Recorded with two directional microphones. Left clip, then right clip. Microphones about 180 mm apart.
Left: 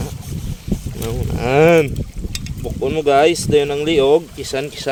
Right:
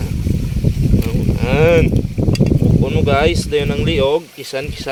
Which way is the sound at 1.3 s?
45° left (ahead or behind).